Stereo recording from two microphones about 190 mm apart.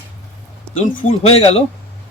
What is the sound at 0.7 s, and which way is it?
Speech, 40° left (ahead or behind).